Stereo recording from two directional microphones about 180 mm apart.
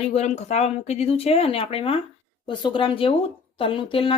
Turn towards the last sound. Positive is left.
turn(degrees=30)  # may be behind; listen again after turning